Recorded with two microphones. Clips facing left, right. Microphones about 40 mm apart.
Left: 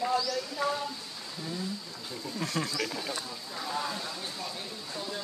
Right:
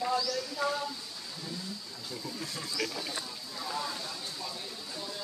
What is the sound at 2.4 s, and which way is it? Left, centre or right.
Wild animals, left.